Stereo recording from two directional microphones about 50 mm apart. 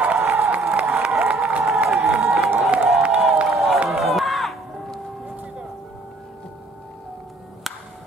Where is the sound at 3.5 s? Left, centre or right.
Centre.